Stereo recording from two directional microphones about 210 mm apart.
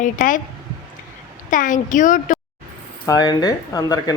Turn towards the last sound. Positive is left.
turn(degrees=15)  # may be behind; listen again after turning